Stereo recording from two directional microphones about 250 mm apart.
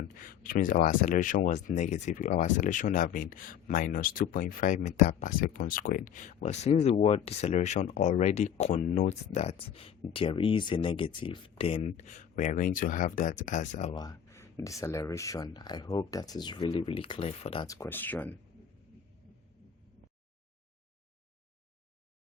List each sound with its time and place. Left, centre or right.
0.2 s speech: left
13.9 s speech: centre